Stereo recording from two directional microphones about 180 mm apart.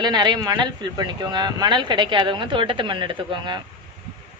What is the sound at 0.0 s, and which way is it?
Speech, 25° right (ahead or behind).